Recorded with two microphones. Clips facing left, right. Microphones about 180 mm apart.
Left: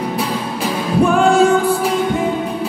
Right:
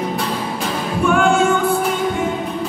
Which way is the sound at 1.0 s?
35° left (ahead or behind).